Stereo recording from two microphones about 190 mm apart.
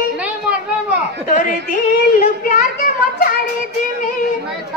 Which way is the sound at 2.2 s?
45° left (ahead or behind).